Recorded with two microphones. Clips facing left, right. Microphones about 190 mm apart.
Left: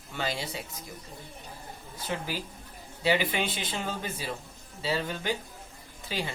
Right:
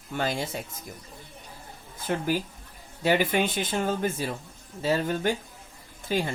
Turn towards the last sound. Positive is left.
turn(degrees=-50)  # may be behind; listen again after turning